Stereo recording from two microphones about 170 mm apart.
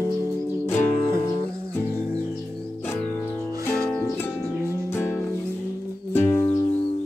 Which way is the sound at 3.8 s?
10° left (ahead or behind).